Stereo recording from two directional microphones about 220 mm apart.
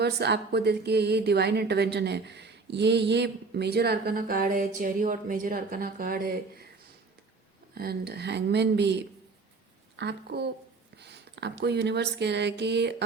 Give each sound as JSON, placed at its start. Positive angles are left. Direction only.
{"t": 0.0, "sound": "a woman's voice", "side_deg": -50}
{"t": 7.8, "sound": "a woman's voice", "side_deg": -45}